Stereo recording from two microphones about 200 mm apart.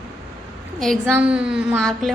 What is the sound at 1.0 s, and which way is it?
A woman's voice, 10° right (ahead or behind).